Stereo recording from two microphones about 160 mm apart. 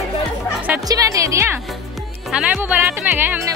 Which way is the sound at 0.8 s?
20° right (ahead or behind).